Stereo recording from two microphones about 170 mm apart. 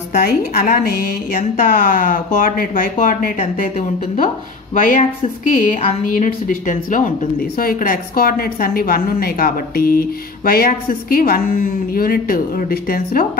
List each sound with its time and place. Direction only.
0.6 s a woman's voice: 60° left (ahead or behind)